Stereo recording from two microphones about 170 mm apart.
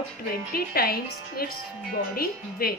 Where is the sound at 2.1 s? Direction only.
60° left (ahead or behind).